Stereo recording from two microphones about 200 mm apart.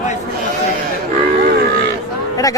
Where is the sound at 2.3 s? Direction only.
15° left (ahead or behind).